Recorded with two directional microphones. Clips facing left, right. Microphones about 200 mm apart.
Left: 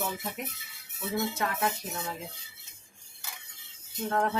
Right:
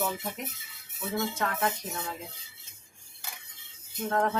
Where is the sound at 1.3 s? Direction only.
5° left (ahead or behind).